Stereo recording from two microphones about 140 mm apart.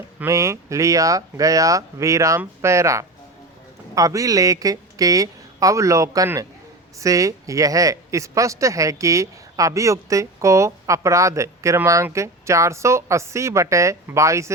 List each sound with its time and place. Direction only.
0.2 s speech: 20° right (ahead or behind)